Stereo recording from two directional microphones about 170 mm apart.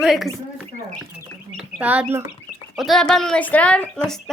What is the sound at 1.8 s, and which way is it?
Speech, 10° right (ahead or behind).